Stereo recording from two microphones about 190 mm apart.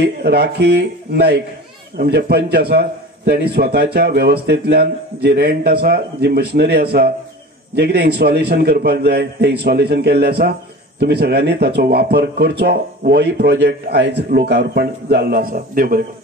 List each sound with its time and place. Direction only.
0.0 s a man's voice: 60° right (ahead or behind)